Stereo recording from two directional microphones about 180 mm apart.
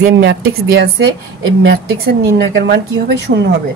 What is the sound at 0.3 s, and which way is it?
Speech, 70° right (ahead or behind).